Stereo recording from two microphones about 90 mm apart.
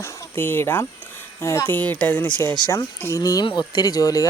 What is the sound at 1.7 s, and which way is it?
Speech, 20° left (ahead or behind).